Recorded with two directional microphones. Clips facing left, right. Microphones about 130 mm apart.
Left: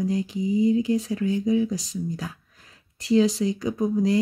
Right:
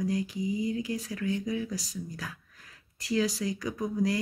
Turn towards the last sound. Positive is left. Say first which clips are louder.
# left 7 dB
turn(degrees=25)  # may be behind; listen again after turning